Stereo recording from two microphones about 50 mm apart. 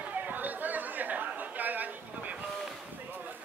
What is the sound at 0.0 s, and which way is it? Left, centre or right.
Chatter, right.